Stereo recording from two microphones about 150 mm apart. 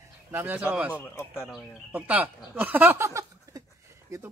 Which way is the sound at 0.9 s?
15° left (ahead or behind).